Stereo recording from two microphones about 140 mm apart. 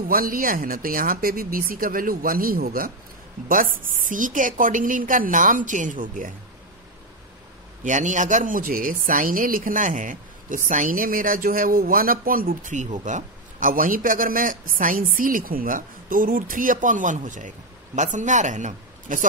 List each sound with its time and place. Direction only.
0.1 s speech: 90° right
3.4 s a woman's voice: 80° right
7.8 s a woman's voice: 60° right (ahead or behind)